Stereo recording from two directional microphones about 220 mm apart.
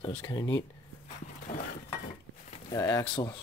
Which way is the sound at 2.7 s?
15° left (ahead or behind).